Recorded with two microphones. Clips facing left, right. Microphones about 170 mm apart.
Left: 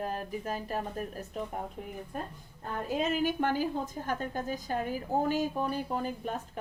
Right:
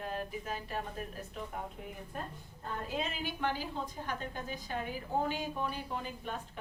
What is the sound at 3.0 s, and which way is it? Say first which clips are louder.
A woman's voice: left 9 dB; 45° left (ahead or behind).